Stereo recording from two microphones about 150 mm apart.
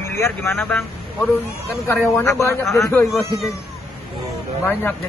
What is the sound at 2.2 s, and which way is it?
Speech, 15° left (ahead or behind).